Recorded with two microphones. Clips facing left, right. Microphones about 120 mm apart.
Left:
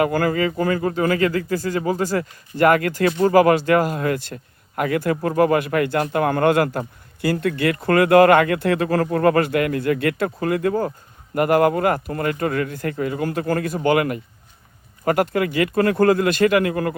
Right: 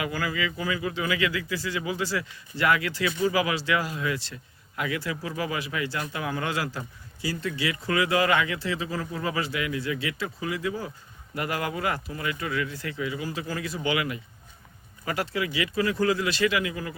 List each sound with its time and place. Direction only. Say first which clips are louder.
0.0 s a man's voice: left 10 dB; 55° left (ahead or behind)